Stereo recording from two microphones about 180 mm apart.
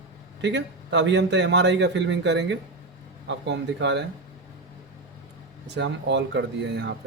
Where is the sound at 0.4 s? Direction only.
75° right (ahead or behind).